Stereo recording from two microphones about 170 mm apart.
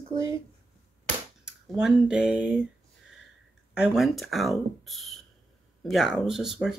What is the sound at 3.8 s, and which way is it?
Speech, centre (ahead or behind).